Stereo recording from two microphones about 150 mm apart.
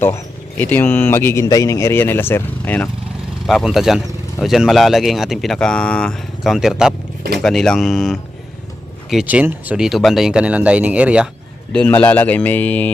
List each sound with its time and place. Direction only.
0.6 s speech: 15° left (ahead or behind)
3.4 s speech: centre (ahead or behind)
11.7 s speech: 10° left (ahead or behind)